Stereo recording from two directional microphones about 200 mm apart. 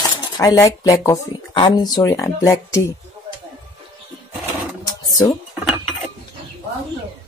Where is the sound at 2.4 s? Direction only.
15° left (ahead or behind).